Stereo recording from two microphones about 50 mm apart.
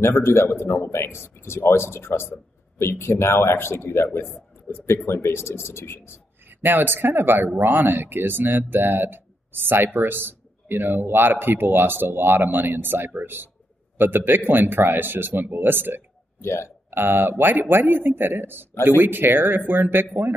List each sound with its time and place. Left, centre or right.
0.0 s a man's voice: left
6.6 s speech: right
16.3 s speech: left
16.9 s speech: right